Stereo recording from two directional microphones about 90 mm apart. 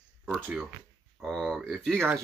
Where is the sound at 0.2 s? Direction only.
10° right (ahead or behind).